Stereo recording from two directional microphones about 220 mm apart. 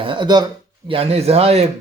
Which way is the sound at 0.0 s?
20° right (ahead or behind).